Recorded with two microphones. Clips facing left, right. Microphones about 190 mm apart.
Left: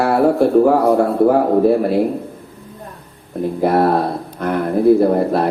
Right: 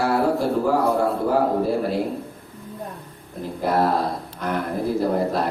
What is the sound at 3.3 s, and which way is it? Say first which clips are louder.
Speech: left 11 dB; 60° left (ahead or behind).